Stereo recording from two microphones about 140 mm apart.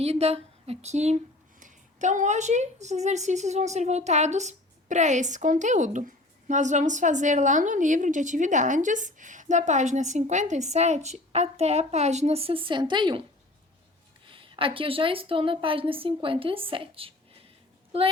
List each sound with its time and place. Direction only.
0.0 s a woman's voice: 50° right (ahead or behind)
14.3 s a woman's voice: 40° right (ahead or behind)